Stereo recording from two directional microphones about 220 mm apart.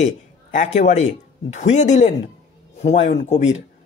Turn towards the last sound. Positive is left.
turn(degrees=30)  # may be behind; listen again after turning